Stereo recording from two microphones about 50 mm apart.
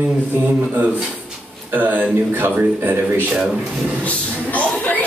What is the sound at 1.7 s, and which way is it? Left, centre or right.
A man's voice, right.